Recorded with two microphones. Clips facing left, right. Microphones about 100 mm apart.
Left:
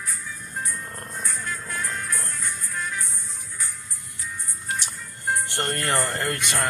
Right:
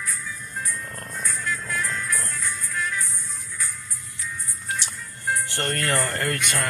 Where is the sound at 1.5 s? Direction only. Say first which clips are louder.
Right 7 dB; 30° left (ahead or behind).